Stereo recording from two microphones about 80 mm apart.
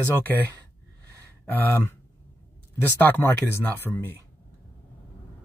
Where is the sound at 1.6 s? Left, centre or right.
Left.